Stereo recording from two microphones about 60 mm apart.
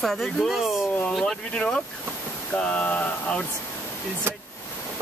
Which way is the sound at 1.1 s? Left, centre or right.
Centre.